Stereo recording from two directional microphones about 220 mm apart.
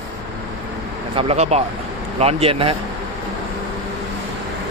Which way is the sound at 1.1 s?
30° right (ahead or behind).